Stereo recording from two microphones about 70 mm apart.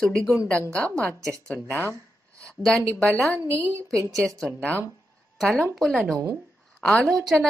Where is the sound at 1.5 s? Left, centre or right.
Left.